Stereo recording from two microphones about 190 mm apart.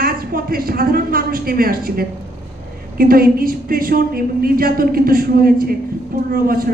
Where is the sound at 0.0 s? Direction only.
50° right (ahead or behind).